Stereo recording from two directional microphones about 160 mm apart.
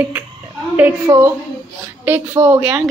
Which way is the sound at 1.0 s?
20° right (ahead or behind).